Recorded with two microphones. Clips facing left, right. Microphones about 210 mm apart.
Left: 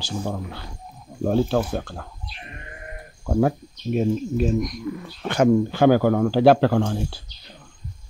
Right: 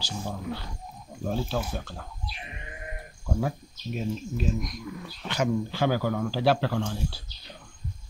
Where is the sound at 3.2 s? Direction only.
55° left (ahead or behind).